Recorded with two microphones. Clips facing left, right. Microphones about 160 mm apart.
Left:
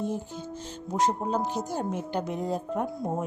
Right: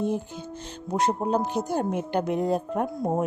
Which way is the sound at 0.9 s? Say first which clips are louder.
Right 2 dB; 65° right (ahead or behind).